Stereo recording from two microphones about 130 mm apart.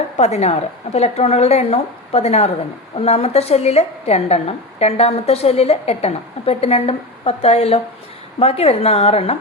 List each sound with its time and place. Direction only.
0.2 s a woman's voice: 60° left (ahead or behind)